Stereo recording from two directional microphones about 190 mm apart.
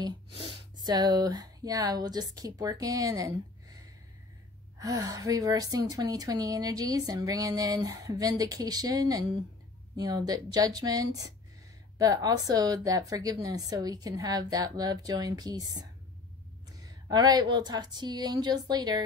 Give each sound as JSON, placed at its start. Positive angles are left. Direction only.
{"t": 0.4, "sound": "a woman's voice", "side_deg": -25}
{"t": 4.7, "sound": "a woman's voice", "side_deg": -20}